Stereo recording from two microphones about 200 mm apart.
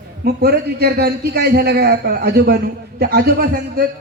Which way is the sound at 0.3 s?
55° right (ahead or behind).